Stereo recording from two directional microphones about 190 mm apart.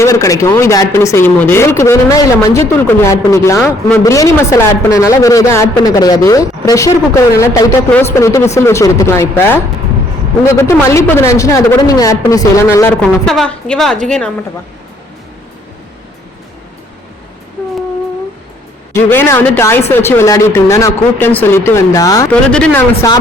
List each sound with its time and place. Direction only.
0.0 s a woman's voice: 20° left (ahead or behind)
18.9 s speech: 10° left (ahead or behind)
22.3 s speech: 5° left (ahead or behind)